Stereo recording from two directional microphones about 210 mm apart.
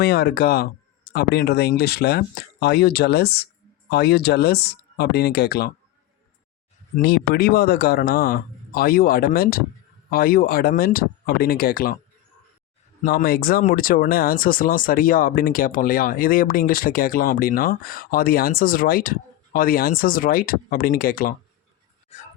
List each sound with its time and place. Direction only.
0.0 s speech: 50° left (ahead or behind)
6.9 s speech: 45° left (ahead or behind)
13.1 s speech: 45° left (ahead or behind)
22.1 s a sound: 30° left (ahead or behind)